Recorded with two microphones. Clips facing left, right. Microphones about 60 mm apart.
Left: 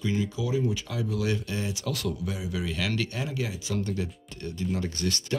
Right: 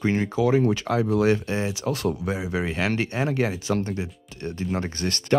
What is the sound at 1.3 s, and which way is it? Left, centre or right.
Speech, right.